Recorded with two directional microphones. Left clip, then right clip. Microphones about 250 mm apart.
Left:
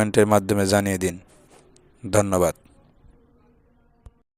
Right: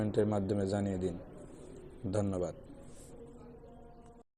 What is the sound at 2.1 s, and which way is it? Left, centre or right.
Speech, left.